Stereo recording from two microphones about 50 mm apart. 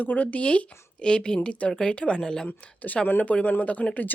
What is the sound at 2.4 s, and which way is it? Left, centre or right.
Speech, left.